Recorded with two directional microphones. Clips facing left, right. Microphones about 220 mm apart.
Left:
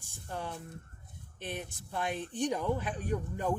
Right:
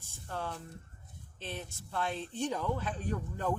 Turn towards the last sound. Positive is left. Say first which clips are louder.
# left 2 dB
turn(degrees=15)  # may be behind; listen again after turning